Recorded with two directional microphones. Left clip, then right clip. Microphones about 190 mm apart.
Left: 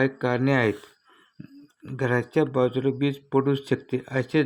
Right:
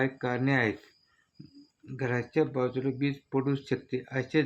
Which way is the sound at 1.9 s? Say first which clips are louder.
Left 6 dB; 25° left (ahead or behind).